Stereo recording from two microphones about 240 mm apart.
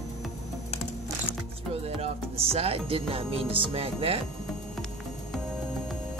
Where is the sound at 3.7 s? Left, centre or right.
Right.